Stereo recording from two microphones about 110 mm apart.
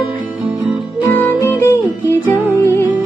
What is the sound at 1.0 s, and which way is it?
Music, 20° left (ahead or behind).